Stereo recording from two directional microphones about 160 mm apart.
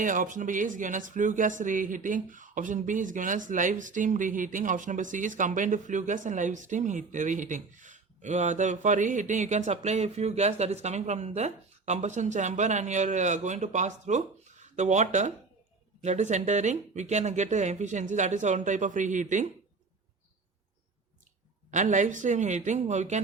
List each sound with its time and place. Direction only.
0.0 s speech: 55° right (ahead or behind)
21.7 s speech: 50° right (ahead or behind)